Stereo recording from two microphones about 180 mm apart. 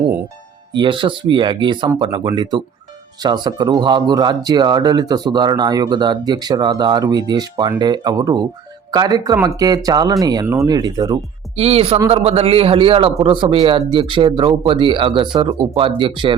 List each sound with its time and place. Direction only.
0.8 s speech: 25° right (ahead or behind)
11.5 s a man's voice: 35° right (ahead or behind)